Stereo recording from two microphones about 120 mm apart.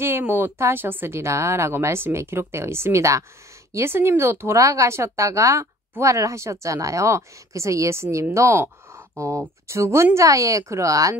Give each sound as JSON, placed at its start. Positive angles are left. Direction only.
{"t": 0.0, "sound": "speech", "side_deg": -20}